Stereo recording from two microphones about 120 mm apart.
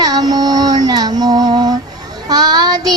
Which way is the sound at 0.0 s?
35° right (ahead or behind).